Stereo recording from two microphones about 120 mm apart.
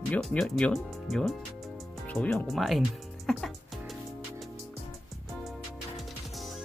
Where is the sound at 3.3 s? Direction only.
5° left (ahead or behind).